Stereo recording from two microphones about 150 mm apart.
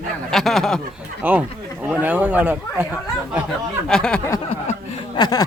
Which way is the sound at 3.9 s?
5° left (ahead or behind).